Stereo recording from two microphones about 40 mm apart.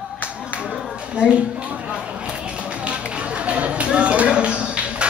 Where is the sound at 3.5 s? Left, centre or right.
Right.